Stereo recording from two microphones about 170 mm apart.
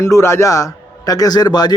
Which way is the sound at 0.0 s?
15° left (ahead or behind).